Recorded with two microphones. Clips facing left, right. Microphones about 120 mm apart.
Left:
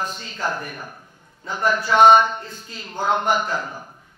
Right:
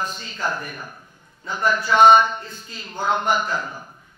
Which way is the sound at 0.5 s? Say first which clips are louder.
Left 1 dB; 45° left (ahead or behind).